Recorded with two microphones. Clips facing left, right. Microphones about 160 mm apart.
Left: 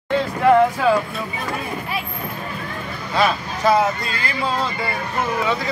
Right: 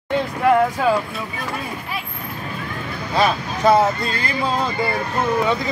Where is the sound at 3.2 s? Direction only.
25° right (ahead or behind).